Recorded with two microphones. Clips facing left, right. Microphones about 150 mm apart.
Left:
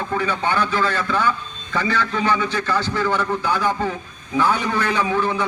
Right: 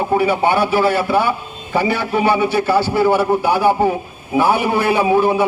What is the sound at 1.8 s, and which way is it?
A man's voice, 10° right (ahead or behind).